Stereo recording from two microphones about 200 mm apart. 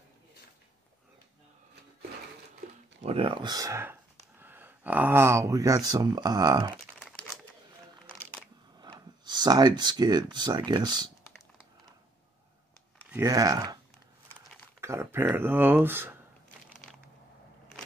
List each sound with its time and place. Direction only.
3.0 s speech: 30° right (ahead or behind)
8.2 s a sound: 5° left (ahead or behind)
8.7 s speech: 20° right (ahead or behind)
13.1 s speech: 15° right (ahead or behind)
14.8 s speech: 15° right (ahead or behind)